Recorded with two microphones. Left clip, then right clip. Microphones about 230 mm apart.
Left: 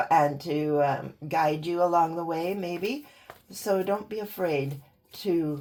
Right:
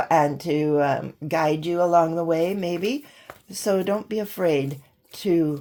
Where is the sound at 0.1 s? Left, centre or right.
Right.